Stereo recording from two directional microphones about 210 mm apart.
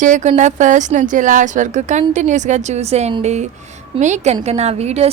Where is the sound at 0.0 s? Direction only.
35° right (ahead or behind).